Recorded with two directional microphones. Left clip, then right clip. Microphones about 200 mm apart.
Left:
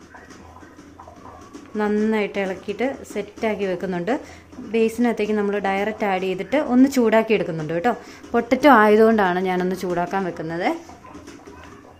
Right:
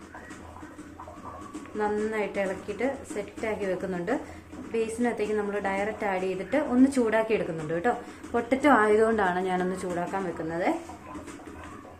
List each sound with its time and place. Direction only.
1.8 s a woman's voice: 50° left (ahead or behind)